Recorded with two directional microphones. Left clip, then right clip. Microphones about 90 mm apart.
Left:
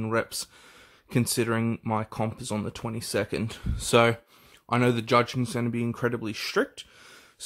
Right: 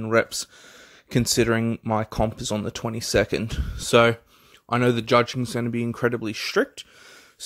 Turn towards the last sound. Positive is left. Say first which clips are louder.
# right 4 dB
turn(degrees=-35)  # may be behind; listen again after turning